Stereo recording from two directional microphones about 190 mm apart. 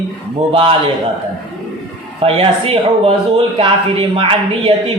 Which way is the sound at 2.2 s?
30° right (ahead or behind).